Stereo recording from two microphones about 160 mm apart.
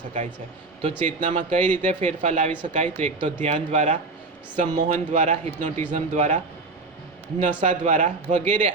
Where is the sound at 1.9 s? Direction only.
45° right (ahead or behind).